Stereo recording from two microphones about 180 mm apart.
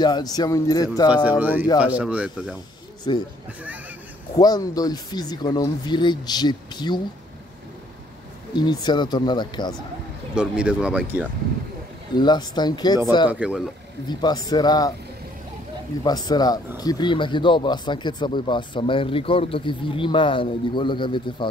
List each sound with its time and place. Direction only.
0.0 s speech: 20° left (ahead or behind)
1.4 s speech: 10° right (ahead or behind)
3.1 s speech: 25° left (ahead or behind)
4.4 s speech: 20° left (ahead or behind)
8.5 s speech: 25° left (ahead or behind)
10.3 s speech: 5° right (ahead or behind)
12.2 s speech: 25° left (ahead or behind)
13.3 s speech: 5° right (ahead or behind)
14.0 s speech: 25° left (ahead or behind)
16.0 s speech: 20° left (ahead or behind)